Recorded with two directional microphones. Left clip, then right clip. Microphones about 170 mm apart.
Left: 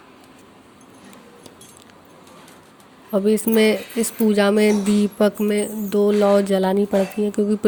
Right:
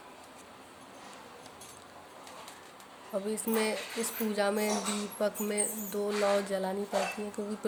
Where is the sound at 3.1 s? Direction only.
50° left (ahead or behind).